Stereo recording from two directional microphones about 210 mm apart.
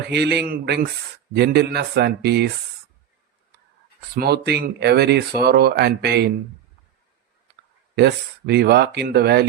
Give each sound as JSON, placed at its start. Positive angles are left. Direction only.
{"t": 0.1, "sound": "speech", "side_deg": -50}
{"t": 4.1, "sound": "speech", "side_deg": -50}
{"t": 7.9, "sound": "speech", "side_deg": -50}